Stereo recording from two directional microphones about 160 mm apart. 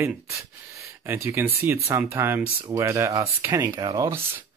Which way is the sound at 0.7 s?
15° right (ahead or behind).